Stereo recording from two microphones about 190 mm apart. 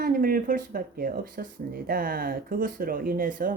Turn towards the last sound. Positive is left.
turn(degrees=-50)  # may be behind; listen again after turning